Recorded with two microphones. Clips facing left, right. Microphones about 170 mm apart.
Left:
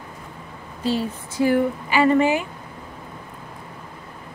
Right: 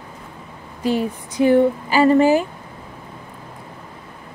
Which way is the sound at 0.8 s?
20° right (ahead or behind).